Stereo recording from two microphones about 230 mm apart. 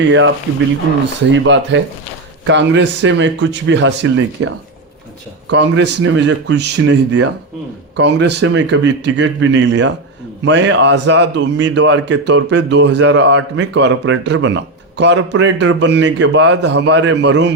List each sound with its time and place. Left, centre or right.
0.0 s a man's voice: right
1.3 s a man's voice: right